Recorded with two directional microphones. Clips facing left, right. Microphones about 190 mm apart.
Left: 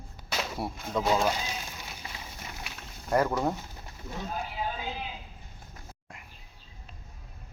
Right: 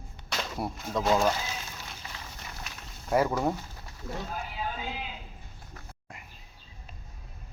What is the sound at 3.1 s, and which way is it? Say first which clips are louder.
Speech: even; 5° right (ahead or behind).